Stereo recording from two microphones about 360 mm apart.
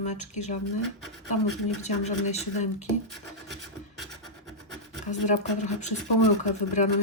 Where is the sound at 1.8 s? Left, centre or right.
Centre.